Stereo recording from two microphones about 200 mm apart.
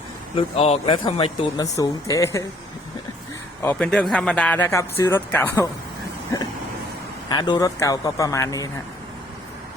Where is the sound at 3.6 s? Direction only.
5° left (ahead or behind).